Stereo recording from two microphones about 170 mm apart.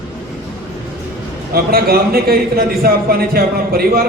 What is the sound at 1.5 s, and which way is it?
Speech, 65° right (ahead or behind).